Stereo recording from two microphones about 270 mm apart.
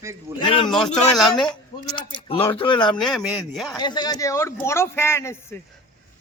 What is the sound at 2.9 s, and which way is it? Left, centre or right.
Speech, centre.